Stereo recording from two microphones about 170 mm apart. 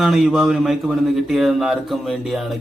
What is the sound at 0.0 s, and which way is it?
Speech, centre (ahead or behind).